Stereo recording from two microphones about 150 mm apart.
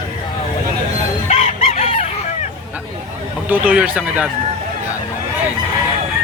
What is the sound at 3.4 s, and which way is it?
Speech, 10° right (ahead or behind).